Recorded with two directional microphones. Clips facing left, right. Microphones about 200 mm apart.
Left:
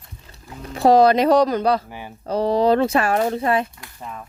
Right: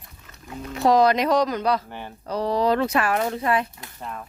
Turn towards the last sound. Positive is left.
turn(degrees=30)  # may be behind; listen again after turning